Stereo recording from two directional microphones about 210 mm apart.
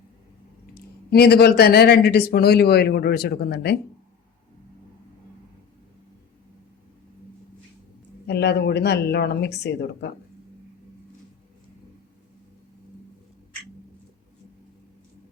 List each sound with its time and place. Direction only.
1.1 s speech: 50° left (ahead or behind)
8.3 s speech: 50° left (ahead or behind)